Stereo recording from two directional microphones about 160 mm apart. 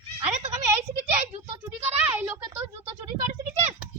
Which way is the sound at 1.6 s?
10° right (ahead or behind).